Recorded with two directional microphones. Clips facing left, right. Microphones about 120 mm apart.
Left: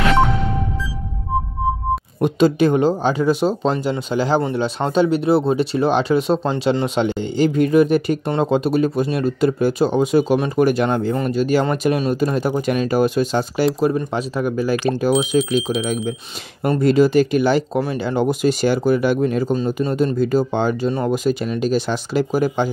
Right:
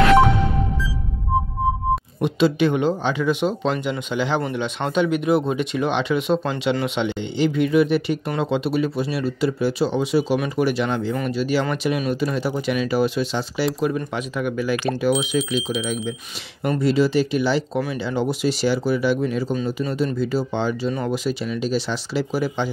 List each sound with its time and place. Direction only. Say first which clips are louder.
2.1 s speech: left 5 dB; 45° left (ahead or behind)
15.5 s speech: left 4 dB; centre (ahead or behind)
16.8 s speech: left 5 dB; 50° left (ahead or behind)
19.5 s speech: left 4 dB; 40° left (ahead or behind)